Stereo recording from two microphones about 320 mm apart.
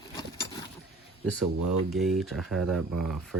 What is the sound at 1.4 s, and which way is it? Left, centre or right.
Speech, centre.